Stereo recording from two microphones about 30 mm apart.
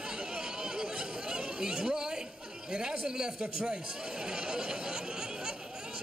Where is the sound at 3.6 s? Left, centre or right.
Right.